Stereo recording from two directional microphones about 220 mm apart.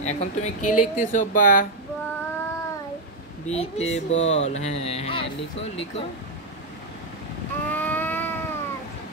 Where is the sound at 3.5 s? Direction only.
30° left (ahead or behind).